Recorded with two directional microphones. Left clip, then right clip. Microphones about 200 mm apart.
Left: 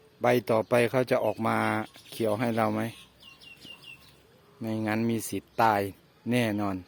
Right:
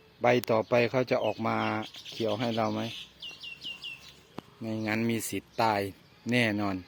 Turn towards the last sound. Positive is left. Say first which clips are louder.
# even
turn(degrees=10)  # may be behind; listen again after turning